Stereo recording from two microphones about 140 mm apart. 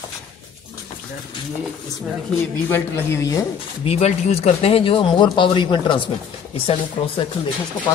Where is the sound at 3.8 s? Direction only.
45° left (ahead or behind).